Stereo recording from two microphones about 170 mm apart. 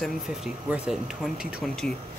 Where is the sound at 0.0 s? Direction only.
Centre (ahead or behind).